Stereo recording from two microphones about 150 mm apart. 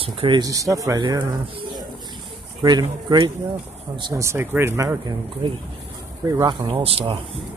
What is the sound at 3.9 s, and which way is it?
Speech, 30° right (ahead or behind).